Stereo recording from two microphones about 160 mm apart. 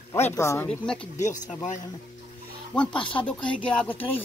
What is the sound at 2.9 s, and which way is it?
Speech, 30° left (ahead or behind).